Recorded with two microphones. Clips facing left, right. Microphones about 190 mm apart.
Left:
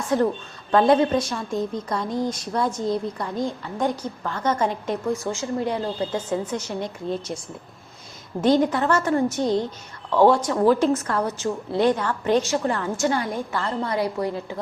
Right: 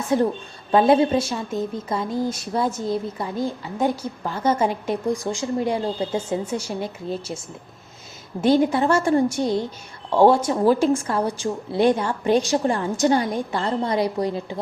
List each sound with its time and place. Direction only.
0.0 s a woman's voice: 10° right (ahead or behind)
8.4 s a woman's voice: 10° right (ahead or behind)